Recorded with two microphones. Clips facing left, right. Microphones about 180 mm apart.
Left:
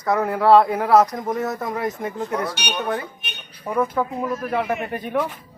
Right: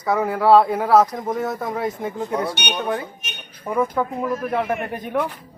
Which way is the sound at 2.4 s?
25° right (ahead or behind).